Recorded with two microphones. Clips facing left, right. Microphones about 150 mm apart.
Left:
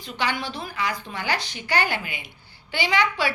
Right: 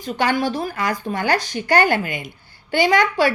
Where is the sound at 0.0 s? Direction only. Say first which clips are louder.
Right 8 dB; 45° right (ahead or behind).